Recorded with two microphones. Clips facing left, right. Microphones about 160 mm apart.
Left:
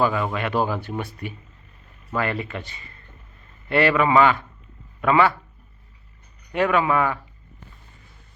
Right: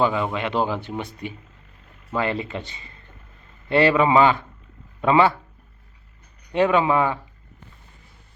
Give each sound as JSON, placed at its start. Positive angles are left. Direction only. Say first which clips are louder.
{"t": 0.0, "sound": "speech", "louder": "even", "side_deg": -20}
{"t": 6.5, "sound": "speech", "louder": "right 2 dB", "side_deg": -25}